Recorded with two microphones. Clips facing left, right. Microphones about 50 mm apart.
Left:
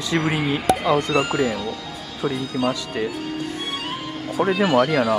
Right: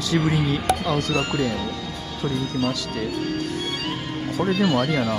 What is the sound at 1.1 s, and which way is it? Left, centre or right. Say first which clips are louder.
Speech: left 3 dB; centre.